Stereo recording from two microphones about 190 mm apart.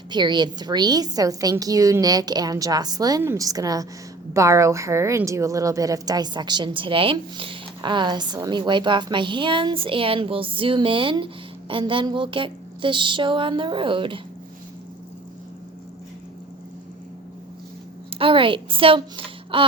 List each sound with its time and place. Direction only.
0.1 s a woman's voice: 25° right (ahead or behind)
18.2 s a child's voice: 30° right (ahead or behind)